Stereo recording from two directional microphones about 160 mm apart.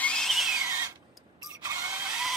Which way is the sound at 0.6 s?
15° right (ahead or behind).